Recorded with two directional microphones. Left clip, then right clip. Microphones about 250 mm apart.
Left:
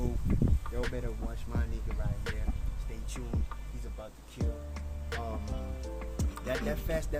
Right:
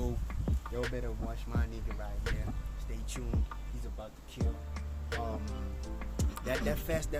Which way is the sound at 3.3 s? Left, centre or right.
Centre.